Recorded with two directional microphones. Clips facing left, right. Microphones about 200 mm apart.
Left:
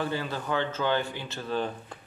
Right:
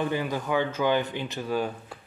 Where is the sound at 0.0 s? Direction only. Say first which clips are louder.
Right 3 dB; 15° right (ahead or behind).